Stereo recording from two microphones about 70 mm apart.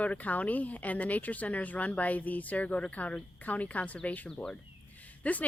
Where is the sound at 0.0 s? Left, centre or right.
Left.